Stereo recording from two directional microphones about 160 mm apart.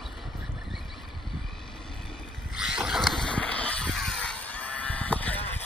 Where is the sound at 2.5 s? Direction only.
5° right (ahead or behind).